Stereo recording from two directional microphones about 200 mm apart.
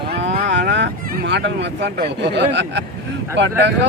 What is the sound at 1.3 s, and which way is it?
Speech, 60° right (ahead or behind).